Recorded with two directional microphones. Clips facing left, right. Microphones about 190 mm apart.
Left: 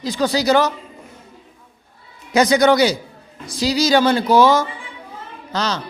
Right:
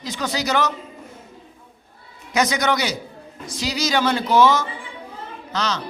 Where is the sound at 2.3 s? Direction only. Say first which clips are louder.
Left 7 dB; 30° left (ahead or behind).